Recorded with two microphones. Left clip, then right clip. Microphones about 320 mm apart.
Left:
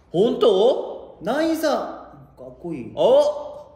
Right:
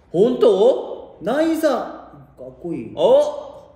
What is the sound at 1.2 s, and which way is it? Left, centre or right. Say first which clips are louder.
A man's voice: right 3 dB; centre.